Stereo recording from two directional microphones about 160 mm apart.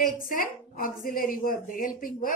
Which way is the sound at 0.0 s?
60° left (ahead or behind).